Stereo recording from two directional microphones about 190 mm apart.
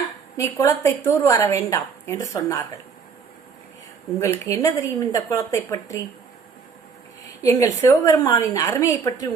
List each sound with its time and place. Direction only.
0.6 s a woman's voice: 15° left (ahead or behind)
4.2 s a woman's voice: 15° left (ahead or behind)
7.4 s a woman's voice: 15° left (ahead or behind)